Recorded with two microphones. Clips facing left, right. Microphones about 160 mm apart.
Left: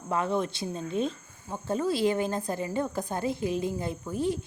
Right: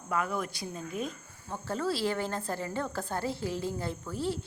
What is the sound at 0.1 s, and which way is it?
A woman's voice, 25° left (ahead or behind).